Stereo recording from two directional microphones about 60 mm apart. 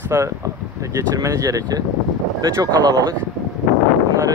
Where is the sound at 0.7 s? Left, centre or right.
Right.